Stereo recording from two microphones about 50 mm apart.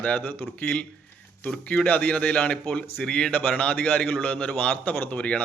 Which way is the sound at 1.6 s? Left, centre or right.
Left.